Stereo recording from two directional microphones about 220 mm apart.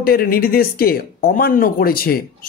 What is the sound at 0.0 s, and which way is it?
Speech, 45° left (ahead or behind).